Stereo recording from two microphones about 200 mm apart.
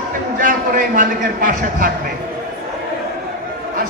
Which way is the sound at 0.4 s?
40° right (ahead or behind).